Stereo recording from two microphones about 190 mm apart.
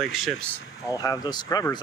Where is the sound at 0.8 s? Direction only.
20° left (ahead or behind).